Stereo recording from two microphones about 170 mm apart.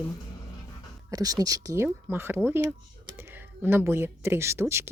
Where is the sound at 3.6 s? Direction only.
10° right (ahead or behind).